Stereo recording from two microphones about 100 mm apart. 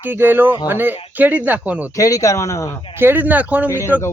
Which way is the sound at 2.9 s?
20° right (ahead or behind).